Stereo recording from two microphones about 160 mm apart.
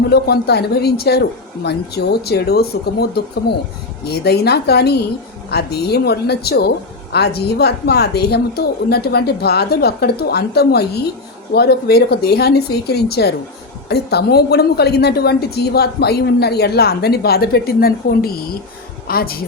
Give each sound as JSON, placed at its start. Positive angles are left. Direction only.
{"t": 0.1, "sound": "a woman's voice", "side_deg": 90}